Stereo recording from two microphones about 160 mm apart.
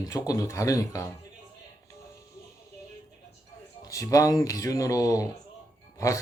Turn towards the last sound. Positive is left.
turn(degrees=20)  # may be behind; listen again after turning